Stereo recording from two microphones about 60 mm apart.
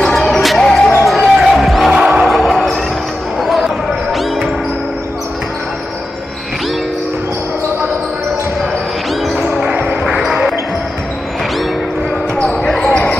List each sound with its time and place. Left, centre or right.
0.0 s basketball bounce: centre
0.7 s music: centre
1.9 s a sound: centre
3.3 s basketball bounce: centre
9.3 s basketball bounce: centre
9.7 s basketball bounce: right
12.4 s basketball bounce: centre